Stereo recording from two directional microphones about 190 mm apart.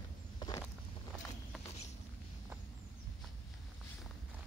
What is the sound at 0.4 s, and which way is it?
Vehicle, 20° left (ahead or behind).